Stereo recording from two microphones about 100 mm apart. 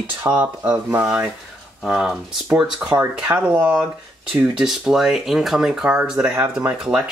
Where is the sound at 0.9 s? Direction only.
10° right (ahead or behind).